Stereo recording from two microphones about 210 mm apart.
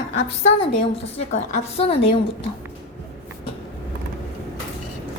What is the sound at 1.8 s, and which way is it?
Speech, 30° left (ahead or behind).